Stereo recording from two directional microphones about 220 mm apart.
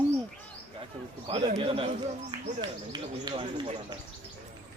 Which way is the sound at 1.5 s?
25° right (ahead or behind).